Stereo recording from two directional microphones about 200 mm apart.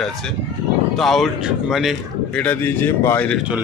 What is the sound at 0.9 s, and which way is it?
Speech, centre (ahead or behind).